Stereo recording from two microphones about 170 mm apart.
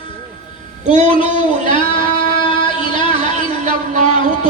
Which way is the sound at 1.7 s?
30° left (ahead or behind).